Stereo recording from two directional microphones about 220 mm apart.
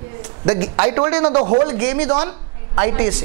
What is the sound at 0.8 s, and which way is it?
Speech, 20° right (ahead or behind).